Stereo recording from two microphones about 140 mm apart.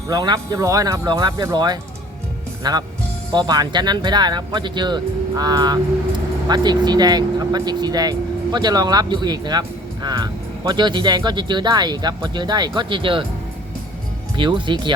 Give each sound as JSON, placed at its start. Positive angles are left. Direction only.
{"t": 0.1, "sound": "speech", "side_deg": -25}
{"t": 14.3, "sound": "speech", "side_deg": -35}